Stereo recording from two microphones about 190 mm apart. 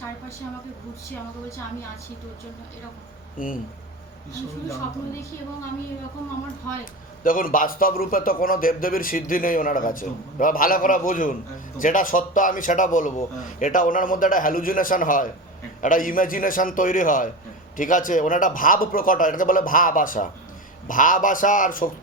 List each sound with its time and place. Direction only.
3.3 s a man's voice: 45° left (ahead or behind)
7.3 s a man's voice: 45° left (ahead or behind)